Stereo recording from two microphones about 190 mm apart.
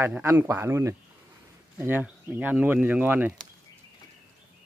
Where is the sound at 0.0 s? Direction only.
15° right (ahead or behind).